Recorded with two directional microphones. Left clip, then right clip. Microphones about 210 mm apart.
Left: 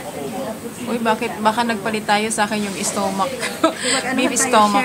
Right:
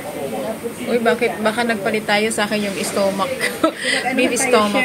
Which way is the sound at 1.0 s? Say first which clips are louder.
Left 1 dB; 15° left (ahead or behind).